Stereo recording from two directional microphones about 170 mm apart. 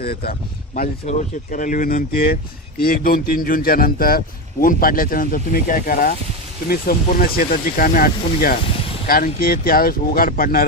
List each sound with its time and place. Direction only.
0.0 s speech: 65° left (ahead or behind)